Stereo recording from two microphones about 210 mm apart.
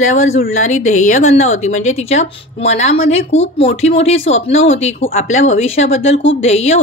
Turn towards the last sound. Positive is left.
turn(degrees=30)  # may be behind; listen again after turning